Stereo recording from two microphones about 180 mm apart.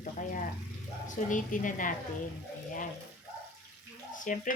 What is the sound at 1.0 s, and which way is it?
Speech, 45° left (ahead or behind).